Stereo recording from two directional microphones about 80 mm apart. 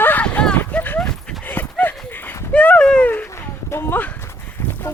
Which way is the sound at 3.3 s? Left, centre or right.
Left.